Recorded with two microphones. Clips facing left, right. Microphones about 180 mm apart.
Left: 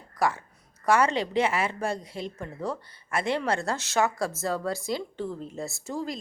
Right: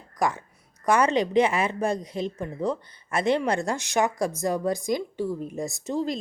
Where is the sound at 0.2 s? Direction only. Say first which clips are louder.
Right 1 dB; 15° right (ahead or behind).